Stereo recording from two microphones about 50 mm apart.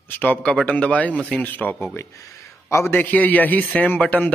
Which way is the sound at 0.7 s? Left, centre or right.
Left.